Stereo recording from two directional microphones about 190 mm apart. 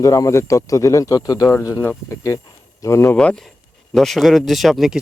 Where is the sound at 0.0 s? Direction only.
15° left (ahead or behind).